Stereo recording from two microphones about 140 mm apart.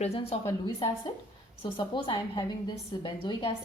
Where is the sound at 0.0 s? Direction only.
45° left (ahead or behind).